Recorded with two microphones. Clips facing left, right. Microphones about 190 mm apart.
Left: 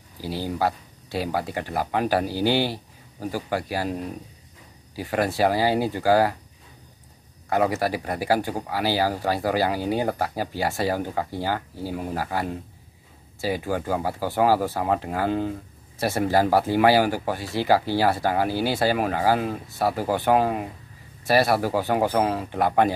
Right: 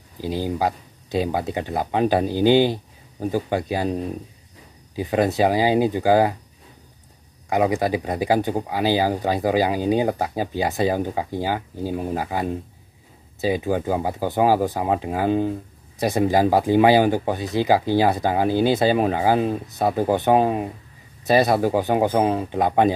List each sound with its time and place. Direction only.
0.2 s speech: 20° right (ahead or behind)
7.4 s speech: 15° right (ahead or behind)